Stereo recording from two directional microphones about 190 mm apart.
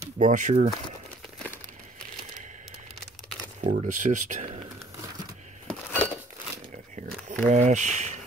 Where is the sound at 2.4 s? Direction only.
40° right (ahead or behind).